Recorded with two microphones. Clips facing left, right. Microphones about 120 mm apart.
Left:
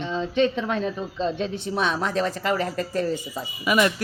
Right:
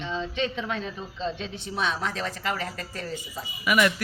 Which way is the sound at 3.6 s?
25° left (ahead or behind).